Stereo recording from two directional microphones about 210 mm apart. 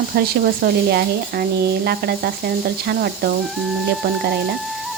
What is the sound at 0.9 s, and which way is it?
Speech, 50° right (ahead or behind).